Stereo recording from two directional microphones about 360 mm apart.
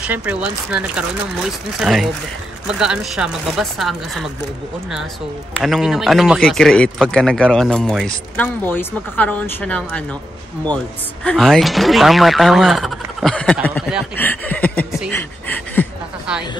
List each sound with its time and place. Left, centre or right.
0.0 s speech: centre
5.6 s speech: centre
11.2 s speech: centre